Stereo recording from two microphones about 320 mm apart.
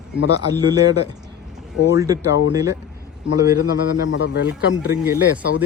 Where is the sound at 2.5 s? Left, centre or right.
Centre.